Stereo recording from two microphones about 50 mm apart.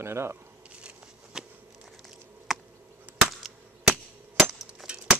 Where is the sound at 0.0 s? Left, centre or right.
Right.